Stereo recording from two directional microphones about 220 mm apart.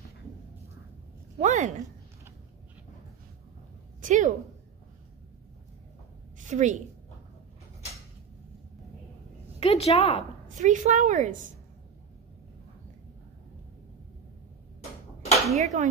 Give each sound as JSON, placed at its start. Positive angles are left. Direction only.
{"t": 1.4, "sound": "a woman's voice", "side_deg": -35}
{"t": 4.0, "sound": "a woman's voice", "side_deg": -35}
{"t": 6.3, "sound": "a sound", "side_deg": -35}
{"t": 9.6, "sound": "a woman's voice", "side_deg": 30}
{"t": 10.5, "sound": "a woman's voice", "side_deg": -35}
{"t": 15.5, "sound": "a woman's voice", "side_deg": -30}